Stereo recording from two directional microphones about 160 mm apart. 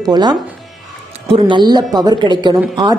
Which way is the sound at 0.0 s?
25° right (ahead or behind).